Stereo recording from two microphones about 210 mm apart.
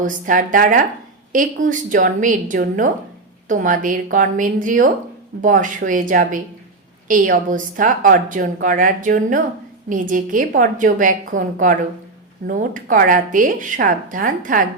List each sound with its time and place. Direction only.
0.0 s a woman's voice: 40° right (ahead or behind)